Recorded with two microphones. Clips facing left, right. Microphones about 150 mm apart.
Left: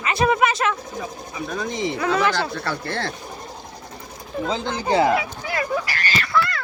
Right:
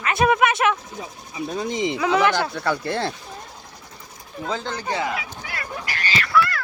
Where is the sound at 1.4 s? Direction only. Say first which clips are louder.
Right 2 dB; 25° right (ahead or behind).